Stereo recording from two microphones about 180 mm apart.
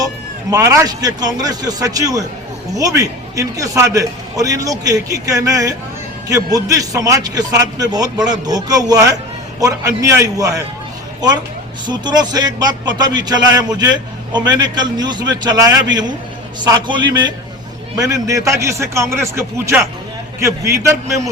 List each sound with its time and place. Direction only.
0.5 s a man's voice: 15° right (ahead or behind)
11.9 s a man's voice: 25° right (ahead or behind)